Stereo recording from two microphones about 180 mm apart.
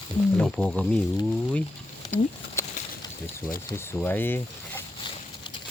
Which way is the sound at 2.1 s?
15° left (ahead or behind).